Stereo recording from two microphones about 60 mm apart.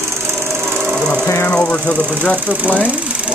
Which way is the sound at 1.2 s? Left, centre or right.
Left.